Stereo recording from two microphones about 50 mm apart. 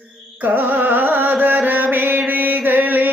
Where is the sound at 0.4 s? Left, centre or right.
Right.